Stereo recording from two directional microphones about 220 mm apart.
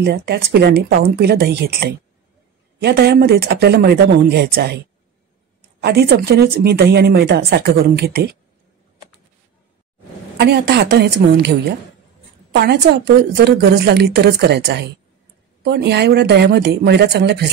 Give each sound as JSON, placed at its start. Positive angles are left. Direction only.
{"t": 0.0, "sound": "speech", "side_deg": -45}
{"t": 5.8, "sound": "speech", "side_deg": -45}
{"t": 10.3, "sound": "speech", "side_deg": -45}